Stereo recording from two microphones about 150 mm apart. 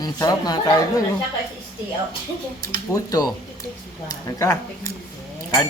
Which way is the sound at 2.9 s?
25° left (ahead or behind).